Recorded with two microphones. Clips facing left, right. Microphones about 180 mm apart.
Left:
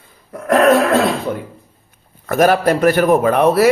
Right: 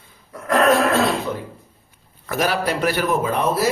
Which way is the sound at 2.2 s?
50° left (ahead or behind).